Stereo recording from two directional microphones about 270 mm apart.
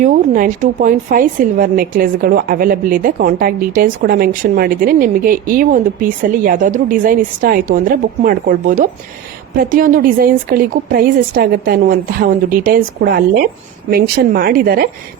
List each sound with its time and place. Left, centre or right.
0.0 s a woman's voice: right